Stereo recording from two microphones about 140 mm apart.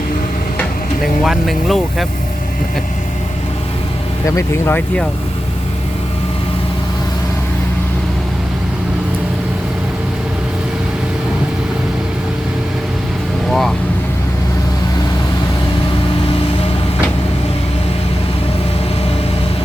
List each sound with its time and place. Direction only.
1.0 s speech: centre (ahead or behind)
4.3 s speech: 20° left (ahead or behind)
13.5 s vehicle: centre (ahead or behind)